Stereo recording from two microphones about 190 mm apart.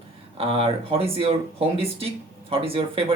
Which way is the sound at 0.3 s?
30° right (ahead or behind).